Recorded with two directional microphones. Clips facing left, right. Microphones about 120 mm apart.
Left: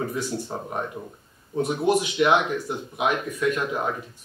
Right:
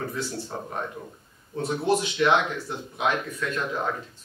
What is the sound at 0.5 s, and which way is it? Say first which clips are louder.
Speech: left 2 dB; 20° left (ahead or behind).